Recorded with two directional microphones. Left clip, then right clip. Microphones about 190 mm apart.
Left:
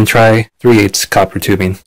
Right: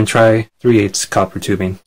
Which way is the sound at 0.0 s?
35° left (ahead or behind).